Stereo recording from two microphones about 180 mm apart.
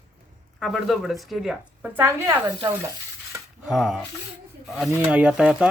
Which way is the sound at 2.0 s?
15° right (ahead or behind).